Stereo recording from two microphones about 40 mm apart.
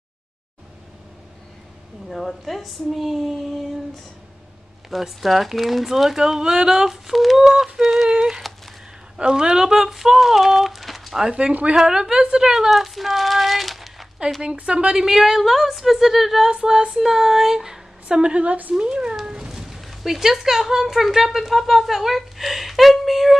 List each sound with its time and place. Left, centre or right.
2.0 s a woman's voice: centre
8.5 s a sound: centre
9.1 s speech: right; by 11.2 s centre
11.7 s a woman's voice: centre
14.4 s a woman's voice: right
15.0 s a woman's voice: centre
16.6 s speech: centre
18.0 s a woman's voice: right
18.8 s a woman's voice: right
19.2 s cat: right
19.5 s speech: centre